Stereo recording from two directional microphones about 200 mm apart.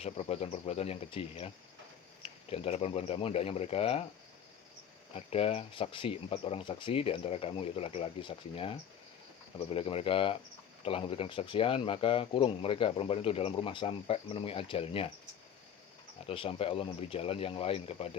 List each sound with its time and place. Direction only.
0.0 s speech: 30° left (ahead or behind)
5.1 s speech: 30° left (ahead or behind)
16.2 s speech: 25° left (ahead or behind)